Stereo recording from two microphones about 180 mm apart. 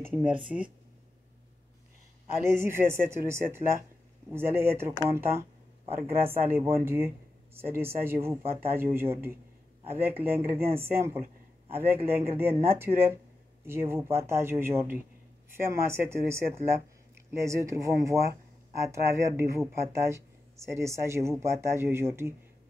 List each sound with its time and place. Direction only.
0.1 s speech: 10° right (ahead or behind)
2.4 s speech: 15° right (ahead or behind)